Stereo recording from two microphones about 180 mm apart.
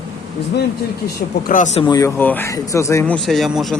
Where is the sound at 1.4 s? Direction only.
45° left (ahead or behind).